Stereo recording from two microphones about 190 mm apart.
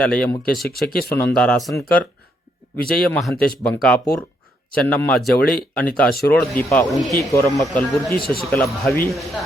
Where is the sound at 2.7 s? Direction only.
50° left (ahead or behind).